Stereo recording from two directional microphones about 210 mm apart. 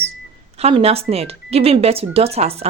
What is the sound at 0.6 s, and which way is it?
Speech, 30° right (ahead or behind).